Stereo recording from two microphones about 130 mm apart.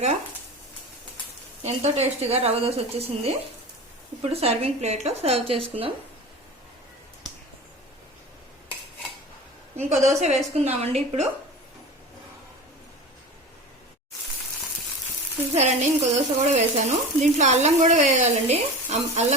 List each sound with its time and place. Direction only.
1.6 s a woman's voice: 55° right (ahead or behind)
4.2 s a woman's voice: 50° right (ahead or behind)
10.0 s frying: 60° right (ahead or behind)
15.5 s frying: 60° right (ahead or behind)